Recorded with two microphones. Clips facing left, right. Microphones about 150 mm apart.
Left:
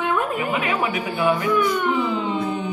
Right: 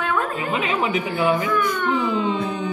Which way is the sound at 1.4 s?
20° left (ahead or behind).